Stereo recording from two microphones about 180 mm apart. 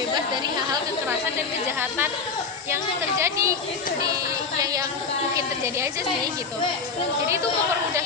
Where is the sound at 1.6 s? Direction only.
10° right (ahead or behind).